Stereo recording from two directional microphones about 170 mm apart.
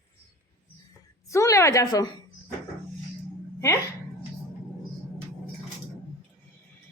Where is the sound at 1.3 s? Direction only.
20° left (ahead or behind).